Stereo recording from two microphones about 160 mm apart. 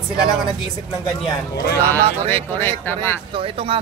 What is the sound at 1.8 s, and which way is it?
Speech, 10° left (ahead or behind).